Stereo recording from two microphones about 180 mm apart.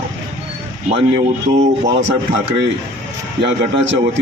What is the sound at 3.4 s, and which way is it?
Speech, 75° right (ahead or behind).